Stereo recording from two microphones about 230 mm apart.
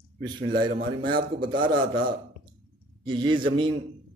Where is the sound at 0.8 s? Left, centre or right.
Right.